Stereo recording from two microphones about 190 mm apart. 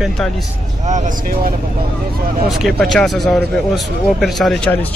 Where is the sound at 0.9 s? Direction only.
40° right (ahead or behind).